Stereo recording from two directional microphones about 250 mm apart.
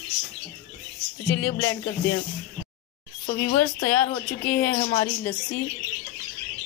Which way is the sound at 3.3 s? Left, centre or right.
Left.